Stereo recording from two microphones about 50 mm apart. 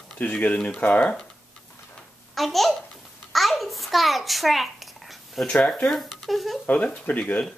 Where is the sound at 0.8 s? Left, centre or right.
Left.